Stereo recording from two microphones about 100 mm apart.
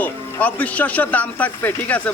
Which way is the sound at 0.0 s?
15° left (ahead or behind).